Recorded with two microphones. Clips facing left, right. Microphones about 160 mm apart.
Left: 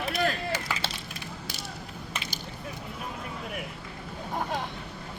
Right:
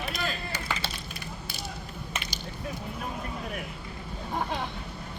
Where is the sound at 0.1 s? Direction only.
60° left (ahead or behind); by 0.9 s 90° left.